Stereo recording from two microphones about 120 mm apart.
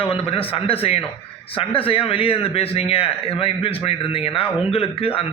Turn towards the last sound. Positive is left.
turn(degrees=55)  # may be behind; listen again after turning